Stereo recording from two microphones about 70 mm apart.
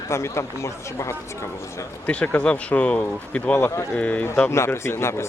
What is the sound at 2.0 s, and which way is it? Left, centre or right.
Speech, centre.